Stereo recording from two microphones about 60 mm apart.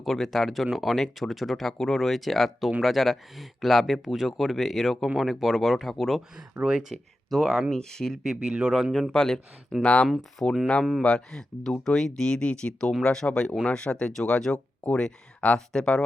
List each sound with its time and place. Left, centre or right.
0.0 s speech: centre
6.3 s speech: centre
7.3 s speech: centre
8.5 s speech: centre
8.9 s speech: centre
9.8 s speech: left
10.1 s speech: centre
10.8 s speech: centre